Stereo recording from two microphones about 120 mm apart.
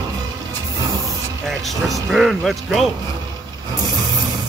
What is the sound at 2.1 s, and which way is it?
Speech, centre (ahead or behind).